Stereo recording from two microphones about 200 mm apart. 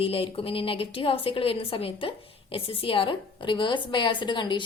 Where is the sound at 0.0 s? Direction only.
25° left (ahead or behind).